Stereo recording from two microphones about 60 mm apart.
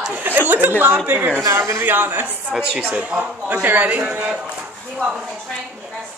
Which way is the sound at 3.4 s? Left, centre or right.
Right.